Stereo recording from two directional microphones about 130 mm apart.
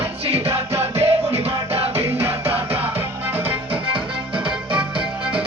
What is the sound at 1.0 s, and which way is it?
Music, 50° right (ahead or behind).